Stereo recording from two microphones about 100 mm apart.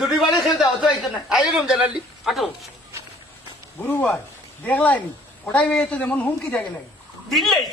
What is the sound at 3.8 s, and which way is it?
A man's voice, 15° left (ahead or behind).